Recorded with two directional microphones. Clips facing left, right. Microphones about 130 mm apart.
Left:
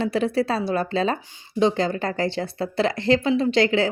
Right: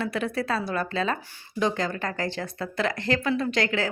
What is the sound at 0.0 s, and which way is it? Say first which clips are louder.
Speech: left 6 dB; 30° left (ahead or behind).